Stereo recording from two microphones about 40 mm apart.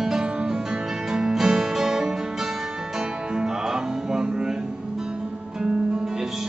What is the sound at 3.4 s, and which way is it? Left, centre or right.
Music, centre.